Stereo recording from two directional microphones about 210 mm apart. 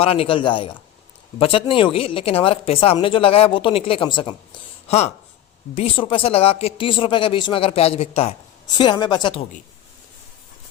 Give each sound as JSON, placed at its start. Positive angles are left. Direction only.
{"t": 0.0, "sound": "speech", "side_deg": 30}